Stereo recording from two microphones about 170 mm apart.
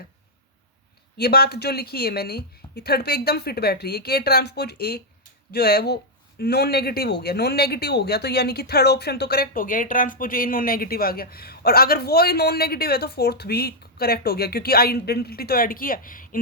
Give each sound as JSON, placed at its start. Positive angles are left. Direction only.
{"t": 1.2, "sound": "speech", "side_deg": 65}